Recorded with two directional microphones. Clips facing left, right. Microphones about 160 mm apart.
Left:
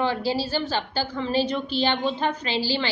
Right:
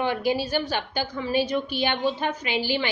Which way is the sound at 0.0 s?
15° right (ahead or behind).